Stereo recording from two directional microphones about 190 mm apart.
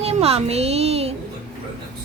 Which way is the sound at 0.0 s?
35° right (ahead or behind).